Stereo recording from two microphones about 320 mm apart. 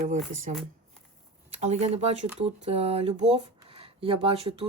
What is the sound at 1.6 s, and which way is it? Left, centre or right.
Speech, right.